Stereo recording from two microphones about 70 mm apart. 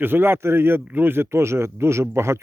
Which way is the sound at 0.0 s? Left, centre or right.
Right.